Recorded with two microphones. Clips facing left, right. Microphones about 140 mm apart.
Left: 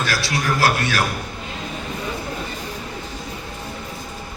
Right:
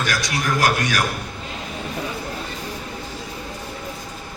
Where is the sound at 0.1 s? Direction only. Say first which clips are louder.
Left 1 dB; 15° right (ahead or behind).